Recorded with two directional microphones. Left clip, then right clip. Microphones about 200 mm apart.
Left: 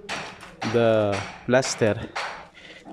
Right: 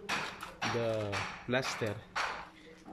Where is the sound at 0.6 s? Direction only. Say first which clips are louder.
Left 14 dB; 40° left (ahead or behind).